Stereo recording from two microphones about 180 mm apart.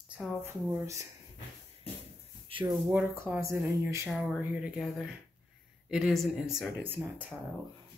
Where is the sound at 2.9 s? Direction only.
10° right (ahead or behind).